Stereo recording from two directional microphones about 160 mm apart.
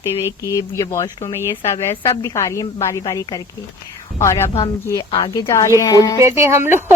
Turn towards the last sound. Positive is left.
turn(degrees=-15)  # may be behind; listen again after turning